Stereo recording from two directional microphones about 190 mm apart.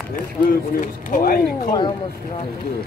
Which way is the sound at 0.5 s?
50° left (ahead or behind).